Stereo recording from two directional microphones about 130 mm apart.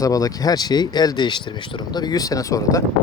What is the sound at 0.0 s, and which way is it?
Speech, 25° left (ahead or behind).